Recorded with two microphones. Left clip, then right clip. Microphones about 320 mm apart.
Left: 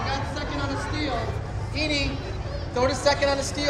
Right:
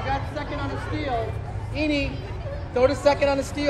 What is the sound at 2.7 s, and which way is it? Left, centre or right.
Speech, right.